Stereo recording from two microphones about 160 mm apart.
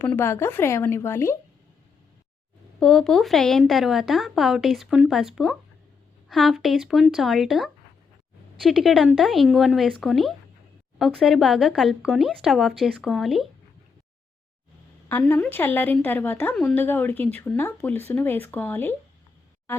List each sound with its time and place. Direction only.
0.0 s a woman's voice: 15° left (ahead or behind)
2.8 s speech: 5° left (ahead or behind)
15.1 s a woman's voice: 15° left (ahead or behind)